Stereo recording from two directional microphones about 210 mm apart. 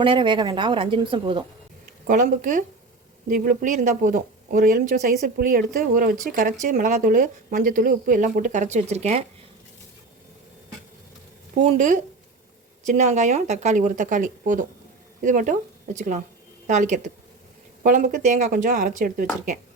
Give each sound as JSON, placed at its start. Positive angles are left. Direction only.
{"t": 0.0, "sound": "a woman's voice", "side_deg": -25}
{"t": 2.0, "sound": "speech", "side_deg": -40}
{"t": 11.5, "sound": "speech", "side_deg": -35}